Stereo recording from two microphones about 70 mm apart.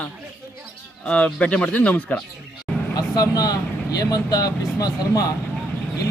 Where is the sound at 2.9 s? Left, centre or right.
Left.